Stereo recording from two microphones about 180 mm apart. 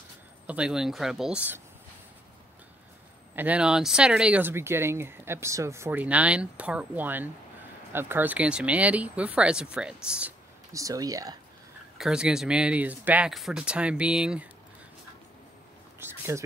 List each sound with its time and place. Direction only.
0.5 s speech: 5° right (ahead or behind)
3.3 s speech: 10° right (ahead or behind)
10.7 s speech: 20° right (ahead or behind)
12.0 s speech: 5° right (ahead or behind)
16.0 s a sound: 15° right (ahead or behind)